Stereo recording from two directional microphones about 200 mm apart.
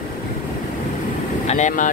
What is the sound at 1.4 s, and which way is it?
Speech, 35° left (ahead or behind).